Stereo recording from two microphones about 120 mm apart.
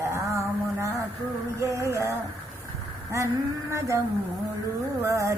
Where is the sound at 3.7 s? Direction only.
25° right (ahead or behind).